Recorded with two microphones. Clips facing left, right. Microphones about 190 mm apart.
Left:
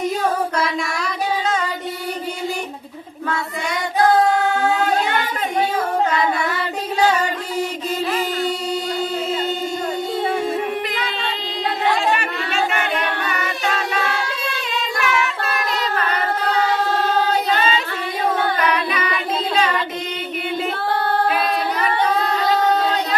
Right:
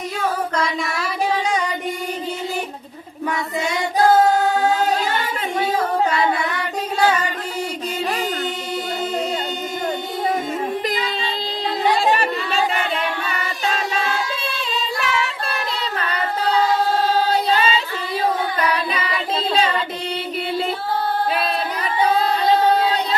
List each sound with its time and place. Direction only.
0.5 s child singing: centre (ahead or behind)
10.9 s child singing: 65° left (ahead or behind)
11.9 s chatter: 35° right (ahead or behind)
14.9 s singing: 30° right (ahead or behind)
18.7 s singing: 30° right (ahead or behind)
21.2 s a capella: 30° right (ahead or behind)